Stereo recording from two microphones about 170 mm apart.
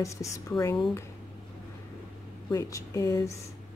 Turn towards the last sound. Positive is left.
turn(degrees=20)  # may be behind; listen again after turning